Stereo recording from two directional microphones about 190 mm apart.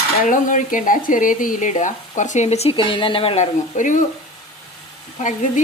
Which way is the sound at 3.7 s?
40° left (ahead or behind).